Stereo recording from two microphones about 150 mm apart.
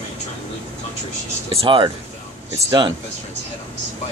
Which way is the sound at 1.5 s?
35° right (ahead or behind).